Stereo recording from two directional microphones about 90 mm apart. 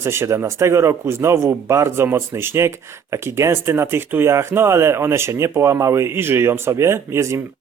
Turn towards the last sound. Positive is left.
turn(degrees=-35)  # may be behind; listen again after turning